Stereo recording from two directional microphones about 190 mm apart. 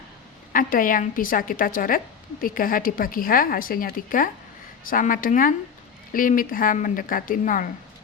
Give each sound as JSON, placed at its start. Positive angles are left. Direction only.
{"t": 0.5, "sound": "a woman's voice", "side_deg": 45}